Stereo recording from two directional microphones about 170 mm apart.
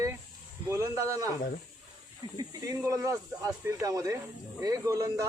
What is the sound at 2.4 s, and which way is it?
Speech, 20° right (ahead or behind).